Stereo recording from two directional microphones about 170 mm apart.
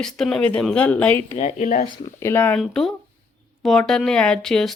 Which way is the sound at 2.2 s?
10° left (ahead or behind).